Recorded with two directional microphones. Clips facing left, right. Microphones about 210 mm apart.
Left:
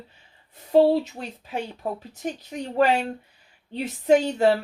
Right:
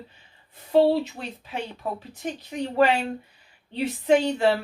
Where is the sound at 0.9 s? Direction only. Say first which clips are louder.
Left 1 dB; 40° left (ahead or behind).